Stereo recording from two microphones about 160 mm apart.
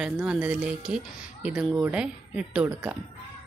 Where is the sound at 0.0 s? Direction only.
5° right (ahead or behind).